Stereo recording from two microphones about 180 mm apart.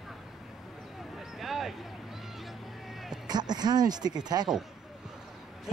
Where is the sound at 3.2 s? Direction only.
25° right (ahead or behind).